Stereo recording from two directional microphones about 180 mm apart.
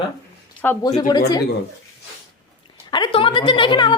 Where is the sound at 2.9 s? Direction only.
25° left (ahead or behind).